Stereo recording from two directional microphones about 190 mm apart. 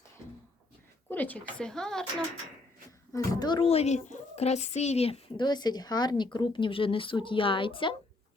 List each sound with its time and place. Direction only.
1.1 s speech: 10° left (ahead or behind)
3.1 s speech: 20° left (ahead or behind)